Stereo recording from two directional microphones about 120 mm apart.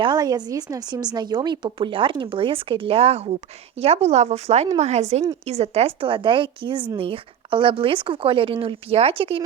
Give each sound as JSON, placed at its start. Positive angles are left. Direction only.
{"t": 0.0, "sound": "a woman's voice", "side_deg": -35}